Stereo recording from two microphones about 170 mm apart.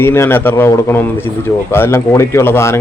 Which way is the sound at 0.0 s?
15° left (ahead or behind).